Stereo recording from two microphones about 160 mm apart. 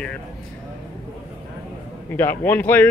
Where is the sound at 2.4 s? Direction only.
10° left (ahead or behind).